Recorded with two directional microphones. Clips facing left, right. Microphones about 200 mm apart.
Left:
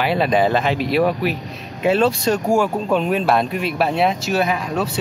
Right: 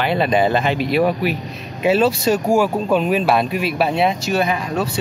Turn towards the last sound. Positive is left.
turn(degrees=0)  # may be behind; listen again after turning